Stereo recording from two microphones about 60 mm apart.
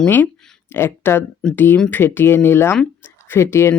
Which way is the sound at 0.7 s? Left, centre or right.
Left.